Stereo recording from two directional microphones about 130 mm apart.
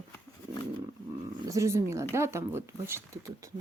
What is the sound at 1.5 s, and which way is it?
Speech, 20° right (ahead or behind).